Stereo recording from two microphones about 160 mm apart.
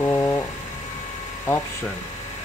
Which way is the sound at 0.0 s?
15° left (ahead or behind).